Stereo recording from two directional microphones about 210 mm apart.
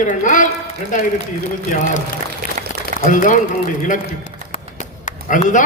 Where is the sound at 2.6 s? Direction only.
40° right (ahead or behind).